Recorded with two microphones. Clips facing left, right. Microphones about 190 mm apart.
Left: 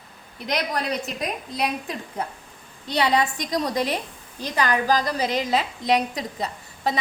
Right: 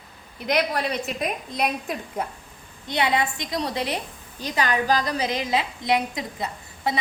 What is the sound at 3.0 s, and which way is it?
Speech, 40° left (ahead or behind).